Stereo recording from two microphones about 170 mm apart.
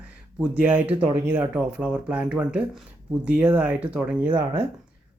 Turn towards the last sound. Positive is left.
turn(degrees=-25)  # may be behind; listen again after turning